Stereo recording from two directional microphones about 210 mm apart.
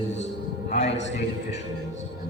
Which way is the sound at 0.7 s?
30° left (ahead or behind).